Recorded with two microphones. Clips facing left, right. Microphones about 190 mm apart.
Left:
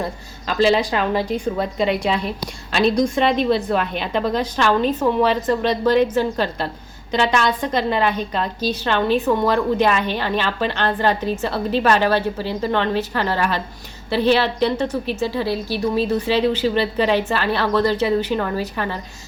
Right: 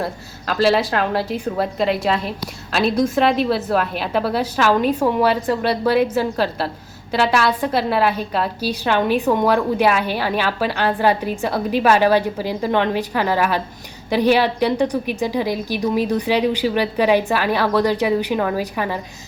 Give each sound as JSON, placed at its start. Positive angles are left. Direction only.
{"t": 0.0, "sound": "a woman's voice", "side_deg": 0}